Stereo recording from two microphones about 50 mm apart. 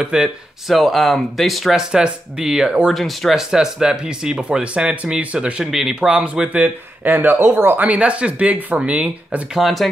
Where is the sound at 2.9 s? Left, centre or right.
Centre.